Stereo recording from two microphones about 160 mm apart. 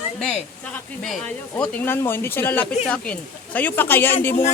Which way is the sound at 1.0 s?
5° left (ahead or behind).